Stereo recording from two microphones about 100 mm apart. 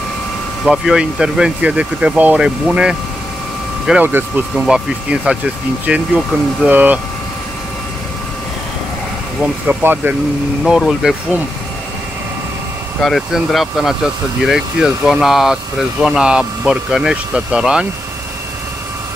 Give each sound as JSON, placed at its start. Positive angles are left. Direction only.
{"t": 0.7, "sound": "speech", "side_deg": -5}
{"t": 4.0, "sound": "speech", "side_deg": -20}
{"t": 4.6, "sound": "speech", "side_deg": -5}
{"t": 9.4, "sound": "speech", "side_deg": -15}
{"t": 10.6, "sound": "speech", "side_deg": 0}
{"t": 13.0, "sound": "speech", "side_deg": 0}